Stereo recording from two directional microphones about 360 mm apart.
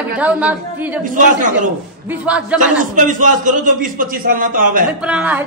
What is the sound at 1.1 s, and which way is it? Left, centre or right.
Speech, right.